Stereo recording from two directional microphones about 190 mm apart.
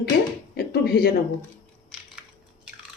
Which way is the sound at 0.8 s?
55° left (ahead or behind).